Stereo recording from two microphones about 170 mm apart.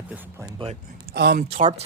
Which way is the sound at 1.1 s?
70° right (ahead or behind).